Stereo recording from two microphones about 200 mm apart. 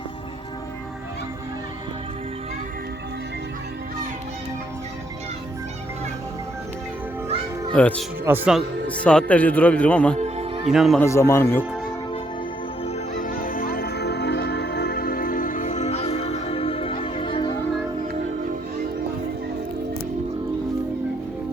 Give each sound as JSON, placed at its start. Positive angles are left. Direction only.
{"t": 7.7, "sound": "speech", "side_deg": 5}
{"t": 8.2, "sound": "a man's voice", "side_deg": -5}
{"t": 10.2, "sound": "music", "side_deg": -35}
{"t": 10.7, "sound": "speech", "side_deg": 0}
{"t": 11.0, "sound": "a man's voice", "side_deg": 15}
{"t": 13.2, "sound": "music", "side_deg": 45}